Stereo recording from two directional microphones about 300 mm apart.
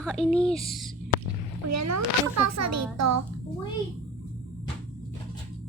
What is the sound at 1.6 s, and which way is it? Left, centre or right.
A child's voice, right.